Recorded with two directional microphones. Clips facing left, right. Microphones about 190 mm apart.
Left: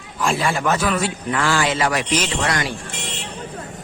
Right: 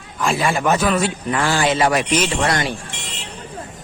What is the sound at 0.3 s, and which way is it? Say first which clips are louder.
A man's voice: right 4 dB; 15° right (ahead or behind).